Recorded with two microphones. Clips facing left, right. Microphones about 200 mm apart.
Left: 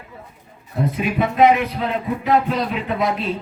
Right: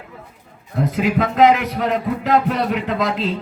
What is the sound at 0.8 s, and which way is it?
A man's voice, 90° right.